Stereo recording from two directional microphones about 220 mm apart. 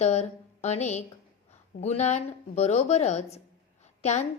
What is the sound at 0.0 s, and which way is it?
A woman's voice, 30° left (ahead or behind).